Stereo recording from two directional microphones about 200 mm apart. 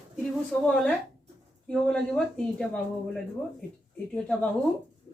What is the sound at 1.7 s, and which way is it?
Speech, 5° left (ahead or behind).